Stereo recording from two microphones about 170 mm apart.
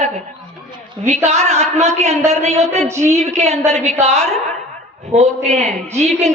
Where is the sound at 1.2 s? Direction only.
40° right (ahead or behind).